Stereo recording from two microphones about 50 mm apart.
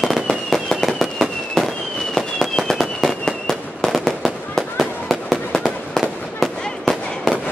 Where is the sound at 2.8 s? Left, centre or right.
Centre.